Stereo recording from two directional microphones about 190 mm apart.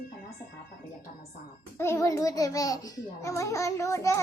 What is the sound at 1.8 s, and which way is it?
A child's voice, 15° left (ahead or behind).